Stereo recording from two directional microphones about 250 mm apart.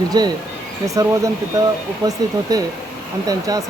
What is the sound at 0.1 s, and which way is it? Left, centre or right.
Speech, centre.